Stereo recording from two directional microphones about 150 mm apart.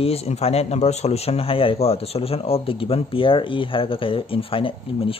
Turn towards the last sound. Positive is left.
turn(degrees=35)  # may be behind; listen again after turning